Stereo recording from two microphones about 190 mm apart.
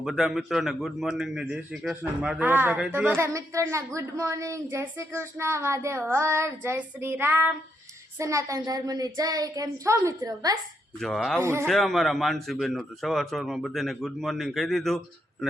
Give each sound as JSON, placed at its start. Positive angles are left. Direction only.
{"t": 0.0, "sound": "a man's voice", "side_deg": 0}
{"t": 11.0, "sound": "a man's voice", "side_deg": 0}